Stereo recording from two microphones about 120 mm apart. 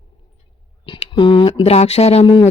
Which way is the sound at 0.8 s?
50° left (ahead or behind).